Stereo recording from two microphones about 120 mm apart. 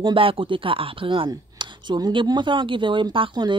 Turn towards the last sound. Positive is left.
turn(degrees=-40)  # may be behind; listen again after turning